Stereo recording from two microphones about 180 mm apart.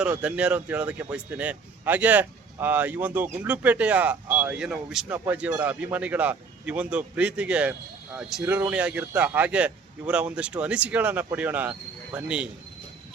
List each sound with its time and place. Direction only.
0.0 s a man's voice: 5° right (ahead or behind)